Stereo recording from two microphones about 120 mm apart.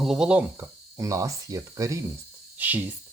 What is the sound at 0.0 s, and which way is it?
Speech, 5° right (ahead or behind).